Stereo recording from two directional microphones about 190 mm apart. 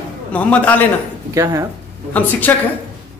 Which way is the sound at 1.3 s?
15° right (ahead or behind).